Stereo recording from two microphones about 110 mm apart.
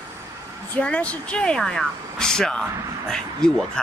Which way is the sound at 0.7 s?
10° left (ahead or behind).